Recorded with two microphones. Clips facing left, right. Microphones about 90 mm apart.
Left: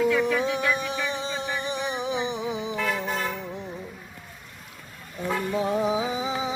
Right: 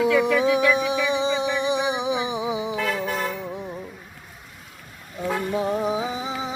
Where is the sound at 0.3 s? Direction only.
65° right (ahead or behind).